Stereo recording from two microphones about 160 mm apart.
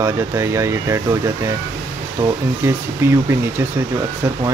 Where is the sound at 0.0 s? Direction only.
15° right (ahead or behind).